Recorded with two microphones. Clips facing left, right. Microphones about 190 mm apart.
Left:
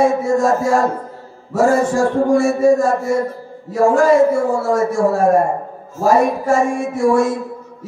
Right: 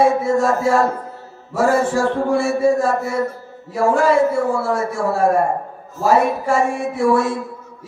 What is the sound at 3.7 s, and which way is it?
A man's voice, 45° left (ahead or behind).